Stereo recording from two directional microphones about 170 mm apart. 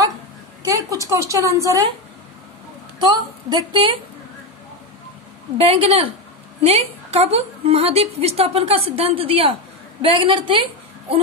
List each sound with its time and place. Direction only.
0.7 s a woman's voice: 20° right (ahead or behind)
3.1 s a woman's voice: 25° right (ahead or behind)
5.6 s a woman's voice: 35° right (ahead or behind)